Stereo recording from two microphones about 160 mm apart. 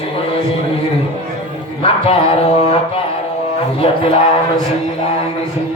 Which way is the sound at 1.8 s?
40° left (ahead or behind).